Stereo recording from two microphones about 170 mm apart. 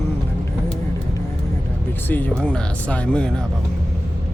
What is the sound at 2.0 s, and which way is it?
Speech, 10° left (ahead or behind).